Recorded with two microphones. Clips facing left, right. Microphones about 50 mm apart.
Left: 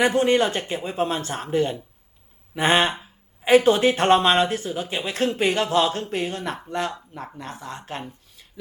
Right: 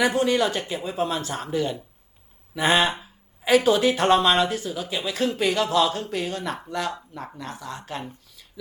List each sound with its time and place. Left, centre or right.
0.0 s speech: left